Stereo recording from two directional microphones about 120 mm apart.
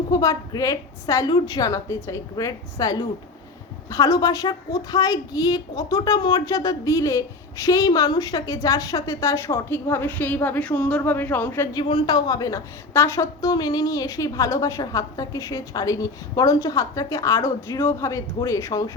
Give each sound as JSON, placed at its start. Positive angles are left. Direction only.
{"t": 0.1, "sound": "a woman's voice", "side_deg": 30}
{"t": 11.7, "sound": "a woman's voice", "side_deg": 40}